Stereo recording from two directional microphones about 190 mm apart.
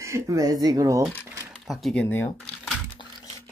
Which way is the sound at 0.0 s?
15° right (ahead or behind).